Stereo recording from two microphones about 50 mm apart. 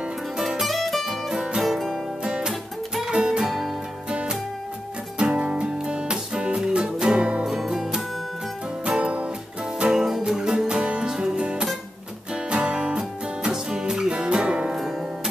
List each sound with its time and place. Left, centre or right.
0.4 s music: centre
1.3 s music: centre
1.6 s music: centre
2.2 s music: centre
5.2 s music: centre
7.4 s music: centre
8.8 s music: right
9.8 s music: centre